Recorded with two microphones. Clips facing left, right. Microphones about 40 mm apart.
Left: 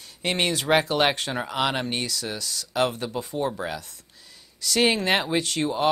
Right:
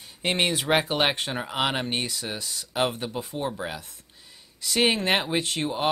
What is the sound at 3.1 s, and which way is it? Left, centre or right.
Speech, centre.